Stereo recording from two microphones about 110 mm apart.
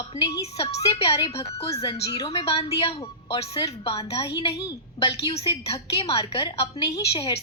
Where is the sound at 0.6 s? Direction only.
65° left (ahead or behind).